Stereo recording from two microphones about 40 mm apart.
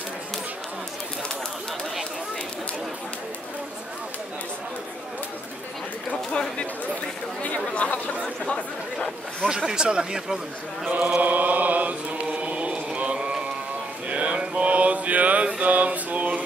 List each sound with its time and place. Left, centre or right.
7.4 s chatter: left
9.7 s speech: centre
11.2 s mantra: right
12.3 s chant: right
14.0 s mantra: right